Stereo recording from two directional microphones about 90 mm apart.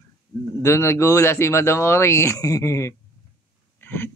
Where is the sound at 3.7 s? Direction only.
25° left (ahead or behind).